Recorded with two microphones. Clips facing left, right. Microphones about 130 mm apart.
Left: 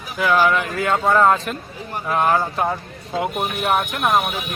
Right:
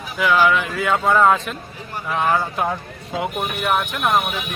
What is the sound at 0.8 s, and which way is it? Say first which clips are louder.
Speech: even; centre (ahead or behind).